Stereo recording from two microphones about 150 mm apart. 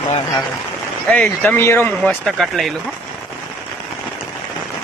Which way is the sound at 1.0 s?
10° left (ahead or behind).